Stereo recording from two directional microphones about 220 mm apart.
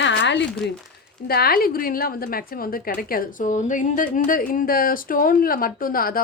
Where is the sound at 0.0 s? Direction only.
55° left (ahead or behind).